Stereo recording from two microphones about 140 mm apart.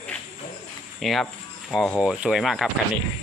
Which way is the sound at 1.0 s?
Centre (ahead or behind).